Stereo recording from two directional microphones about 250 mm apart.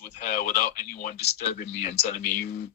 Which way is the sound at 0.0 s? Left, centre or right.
Left.